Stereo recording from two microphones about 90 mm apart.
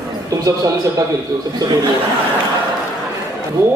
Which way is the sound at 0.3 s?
40° right (ahead or behind).